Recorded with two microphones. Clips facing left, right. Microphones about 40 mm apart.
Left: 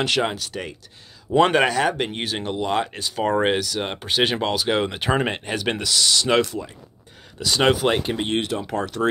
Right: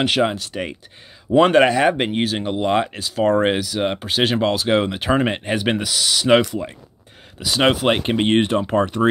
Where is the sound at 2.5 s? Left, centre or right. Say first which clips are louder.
Right 4 dB; right.